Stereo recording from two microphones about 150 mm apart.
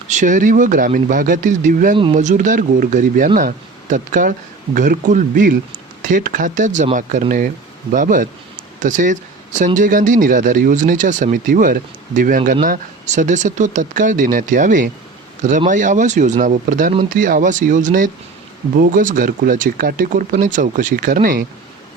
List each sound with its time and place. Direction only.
0.1 s speech: 55° right (ahead or behind)